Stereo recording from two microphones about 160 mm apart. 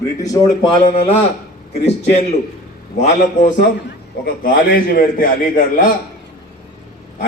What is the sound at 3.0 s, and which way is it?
Speech, 50° left (ahead or behind).